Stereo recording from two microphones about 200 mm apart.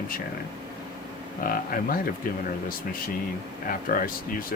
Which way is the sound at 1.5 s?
45° left (ahead or behind).